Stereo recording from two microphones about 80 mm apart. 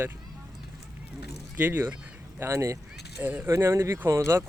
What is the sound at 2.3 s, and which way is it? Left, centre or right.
Speech, right.